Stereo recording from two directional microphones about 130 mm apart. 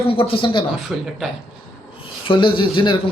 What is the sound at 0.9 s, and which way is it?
Speech, 5° right (ahead or behind).